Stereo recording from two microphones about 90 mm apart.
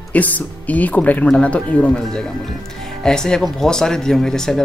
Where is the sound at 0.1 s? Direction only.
15° left (ahead or behind).